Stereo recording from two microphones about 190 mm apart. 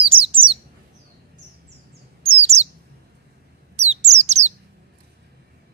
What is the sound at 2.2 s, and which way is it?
Bird, 35° right (ahead or behind).